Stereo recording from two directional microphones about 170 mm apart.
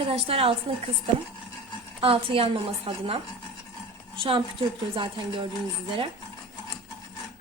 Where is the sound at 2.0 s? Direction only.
35° right (ahead or behind).